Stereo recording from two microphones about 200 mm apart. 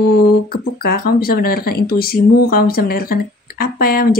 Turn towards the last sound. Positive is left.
turn(degrees=50)  # may be behind; listen again after turning